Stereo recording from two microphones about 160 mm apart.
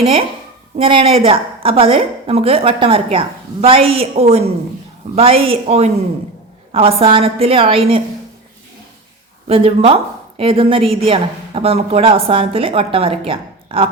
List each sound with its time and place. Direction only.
0.8 s a woman's voice: 35° right (ahead or behind)
9.5 s a woman's voice: 35° right (ahead or behind)